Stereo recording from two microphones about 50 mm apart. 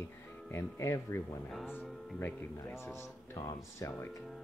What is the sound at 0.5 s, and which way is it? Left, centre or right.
Speech, left.